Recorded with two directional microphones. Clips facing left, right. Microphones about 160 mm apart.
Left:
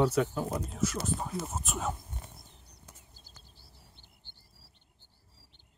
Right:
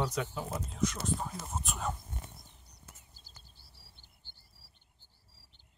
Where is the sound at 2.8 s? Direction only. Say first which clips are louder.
Even; 20° left (ahead or behind).